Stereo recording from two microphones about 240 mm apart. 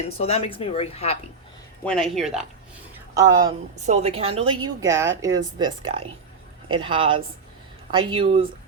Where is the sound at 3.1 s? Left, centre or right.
Centre.